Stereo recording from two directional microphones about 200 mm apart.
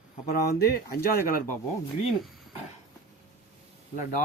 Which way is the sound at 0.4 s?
50° left (ahead or behind).